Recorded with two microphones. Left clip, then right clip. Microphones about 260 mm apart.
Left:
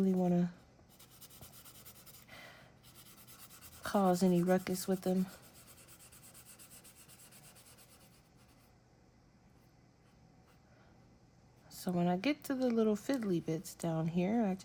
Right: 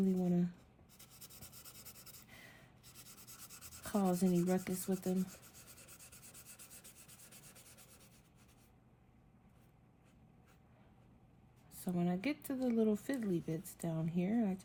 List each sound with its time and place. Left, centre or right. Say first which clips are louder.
0.0 s writing: left 4 dB; left
3.8 s speech: left 6 dB; left
11.8 s speech: left 5 dB; left